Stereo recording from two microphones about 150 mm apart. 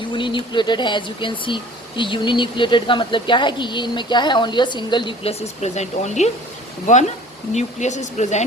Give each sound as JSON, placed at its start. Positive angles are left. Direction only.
{"t": 0.1, "sound": "speech", "side_deg": 35}
{"t": 7.5, "sound": "speech", "side_deg": 50}